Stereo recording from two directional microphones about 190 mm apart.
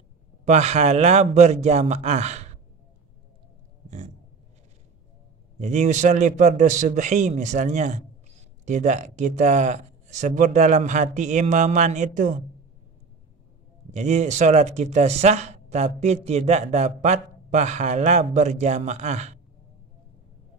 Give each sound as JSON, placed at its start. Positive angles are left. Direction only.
{"t": 0.5, "sound": "a man's voice", "side_deg": -35}
{"t": 5.6, "sound": "a man's voice", "side_deg": -40}
{"t": 13.9, "sound": "a man's voice", "side_deg": -35}